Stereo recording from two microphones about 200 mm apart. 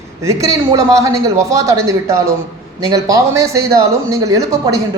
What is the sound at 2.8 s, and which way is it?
A man's voice, 15° right (ahead or behind).